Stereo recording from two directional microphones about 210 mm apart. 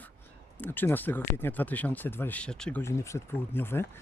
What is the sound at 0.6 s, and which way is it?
Speech, 10° left (ahead or behind).